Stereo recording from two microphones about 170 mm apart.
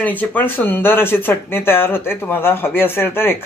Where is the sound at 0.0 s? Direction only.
10° left (ahead or behind).